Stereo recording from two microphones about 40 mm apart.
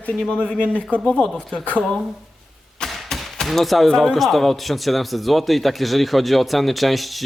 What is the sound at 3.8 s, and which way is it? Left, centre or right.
A man's voice, centre.